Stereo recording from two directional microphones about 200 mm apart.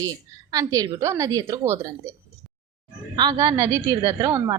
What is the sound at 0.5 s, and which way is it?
A woman's voice, 15° right (ahead or behind).